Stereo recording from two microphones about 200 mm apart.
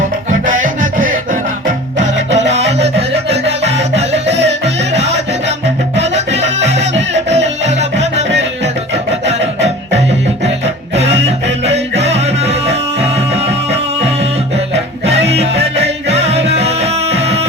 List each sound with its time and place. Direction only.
0.3 s music: 40° right (ahead or behind)
2.1 s music: 65° right (ahead or behind)
2.5 s music: 35° right (ahead or behind)
10.9 s music: 30° right (ahead or behind)